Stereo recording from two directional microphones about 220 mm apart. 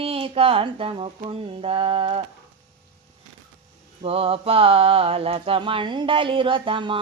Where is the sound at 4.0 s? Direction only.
25° right (ahead or behind).